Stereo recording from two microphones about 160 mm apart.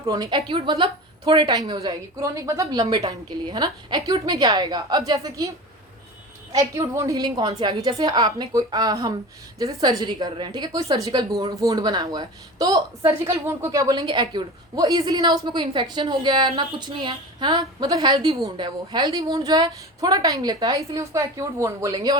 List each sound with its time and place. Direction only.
0.0 s a woman's voice: 20° right (ahead or behind)
6.5 s a woman's voice: 20° right (ahead or behind)